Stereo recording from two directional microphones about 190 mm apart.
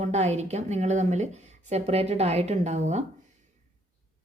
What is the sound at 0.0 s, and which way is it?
A woman's voice, 35° right (ahead or behind).